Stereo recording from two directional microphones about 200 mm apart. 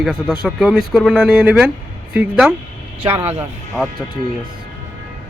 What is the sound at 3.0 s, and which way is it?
Speech, 25° right (ahead or behind).